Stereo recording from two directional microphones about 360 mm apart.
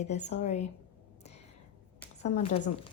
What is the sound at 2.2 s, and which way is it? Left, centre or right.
Speech, centre.